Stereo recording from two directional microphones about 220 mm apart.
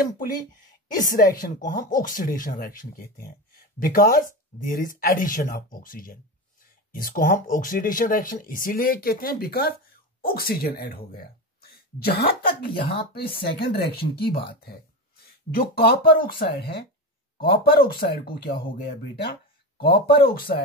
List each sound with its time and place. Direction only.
0.9 s speech: 35° left (ahead or behind)
19.8 s speech: 25° left (ahead or behind)
20.3 s speech: 45° left (ahead or behind)